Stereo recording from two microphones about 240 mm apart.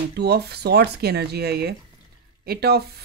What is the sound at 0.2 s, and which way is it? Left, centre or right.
Speech, right.